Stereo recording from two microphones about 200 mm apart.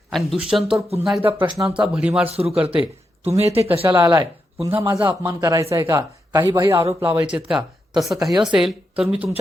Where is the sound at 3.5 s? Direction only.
30° right (ahead or behind).